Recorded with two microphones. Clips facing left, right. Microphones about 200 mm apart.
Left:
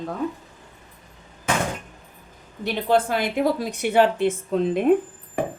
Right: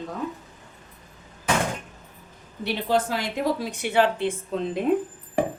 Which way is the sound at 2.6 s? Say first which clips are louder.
Left 3 dB; 55° left (ahead or behind).